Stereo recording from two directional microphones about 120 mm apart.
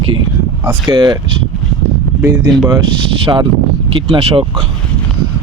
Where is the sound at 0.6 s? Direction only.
30° right (ahead or behind).